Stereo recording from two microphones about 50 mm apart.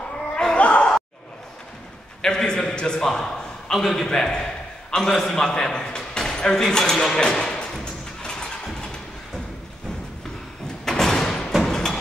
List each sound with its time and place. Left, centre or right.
0.6 s a sound: left
2.2 s a man's voice: centre
7.8 s music: centre
8.6 s vehicle: centre
10.9 s thump: centre
11.6 s a sound: centre